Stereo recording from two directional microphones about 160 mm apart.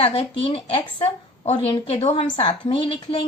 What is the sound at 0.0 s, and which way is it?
A woman's voice, 35° left (ahead or behind).